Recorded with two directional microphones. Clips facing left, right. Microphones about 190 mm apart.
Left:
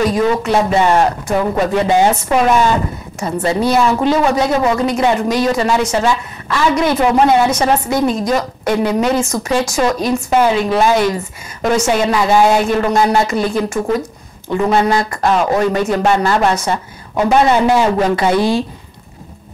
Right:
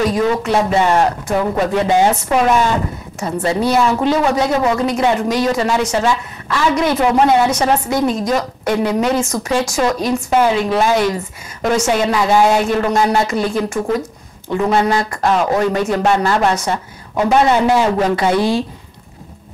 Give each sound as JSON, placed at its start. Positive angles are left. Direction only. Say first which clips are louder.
{"t": 0.0, "sound": "speech", "louder": "left 1 dB", "side_deg": 15}